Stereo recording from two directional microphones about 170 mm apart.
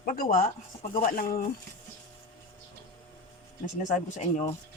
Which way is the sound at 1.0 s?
55° left (ahead or behind).